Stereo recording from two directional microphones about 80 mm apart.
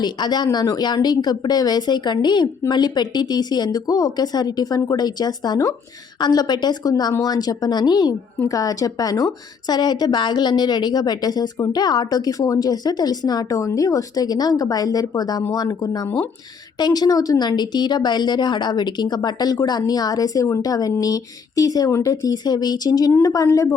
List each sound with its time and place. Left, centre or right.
0.0 s speech: left
8.4 s speech: left
13.6 s speech: left
21.8 s speech: left
22.1 s speech: left